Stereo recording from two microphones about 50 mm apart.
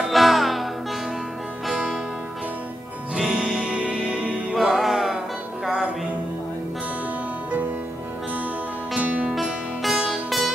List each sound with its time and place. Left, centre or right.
0.1 s music: centre
3.2 s music: centre
4.6 s music: centre
8.9 s music: right
9.3 s music: centre